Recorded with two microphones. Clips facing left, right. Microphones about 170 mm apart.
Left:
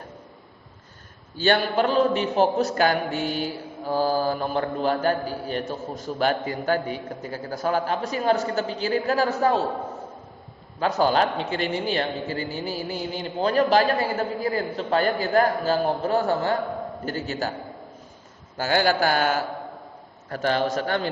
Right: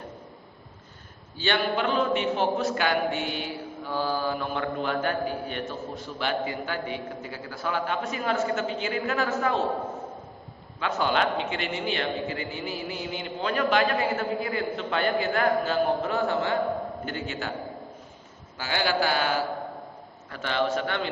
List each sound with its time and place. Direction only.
1.4 s speech: 40° left (ahead or behind)
10.8 s speech: 40° left (ahead or behind)
18.5 s a man's voice: 45° left (ahead or behind)